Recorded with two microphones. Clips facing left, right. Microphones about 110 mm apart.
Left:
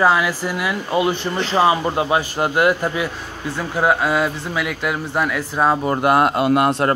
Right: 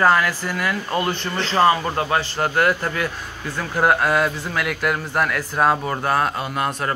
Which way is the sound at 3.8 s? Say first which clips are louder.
Even; centre (ahead or behind).